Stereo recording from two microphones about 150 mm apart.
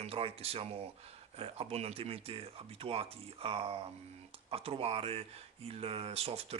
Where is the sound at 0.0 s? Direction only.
40° right (ahead or behind).